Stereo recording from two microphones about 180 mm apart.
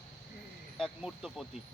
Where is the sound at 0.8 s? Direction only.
Centre (ahead or behind).